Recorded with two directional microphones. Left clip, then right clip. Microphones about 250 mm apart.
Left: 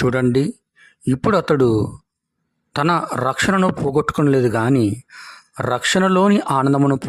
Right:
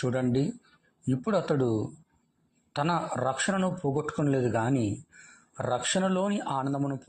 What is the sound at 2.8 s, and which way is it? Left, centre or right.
A man's voice, left.